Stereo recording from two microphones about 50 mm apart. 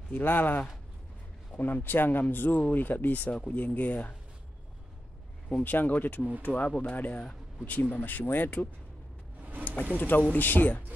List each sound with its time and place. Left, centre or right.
0.1 s speech: left
3.3 s speech: left
5.5 s speech: left
9.9 s speech: left